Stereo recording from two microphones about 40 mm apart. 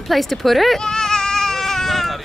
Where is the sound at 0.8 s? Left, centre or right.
Centre.